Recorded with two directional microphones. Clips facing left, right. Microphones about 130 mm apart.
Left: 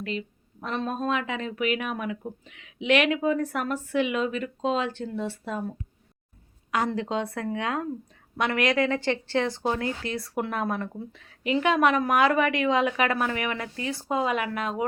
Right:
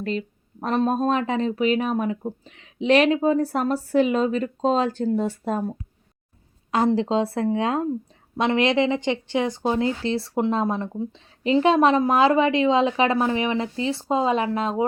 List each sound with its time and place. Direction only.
0.0 s speech: 40° right (ahead or behind)
6.7 s speech: 30° right (ahead or behind)